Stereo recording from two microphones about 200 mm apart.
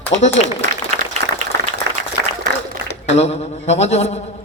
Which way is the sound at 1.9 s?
60° right (ahead or behind).